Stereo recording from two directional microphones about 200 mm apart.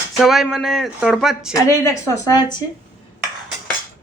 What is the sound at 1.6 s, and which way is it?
A woman's voice, 15° left (ahead or behind).